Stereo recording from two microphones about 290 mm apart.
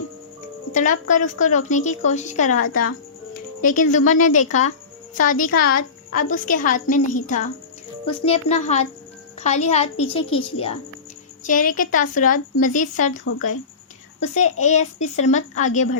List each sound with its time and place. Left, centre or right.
0.7 s speech: left
10.2 s a woman's voice: left
11.4 s speech: left